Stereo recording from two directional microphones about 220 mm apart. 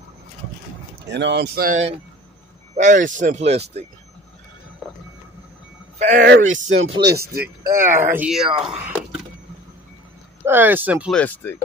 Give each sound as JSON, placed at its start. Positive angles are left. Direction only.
{"t": 1.0, "sound": "speech", "side_deg": -50}
{"t": 5.9, "sound": "speech", "side_deg": -40}
{"t": 7.9, "sound": "speech", "side_deg": -10}
{"t": 10.4, "sound": "speech", "side_deg": -10}
{"t": 11.1, "sound": "speech", "side_deg": 10}